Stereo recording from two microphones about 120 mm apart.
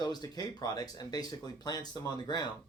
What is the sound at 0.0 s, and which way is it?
Speech, 35° left (ahead or behind).